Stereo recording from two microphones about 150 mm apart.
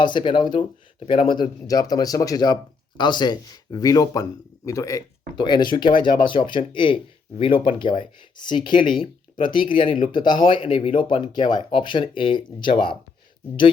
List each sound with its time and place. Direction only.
0.0 s speech: 30° left (ahead or behind)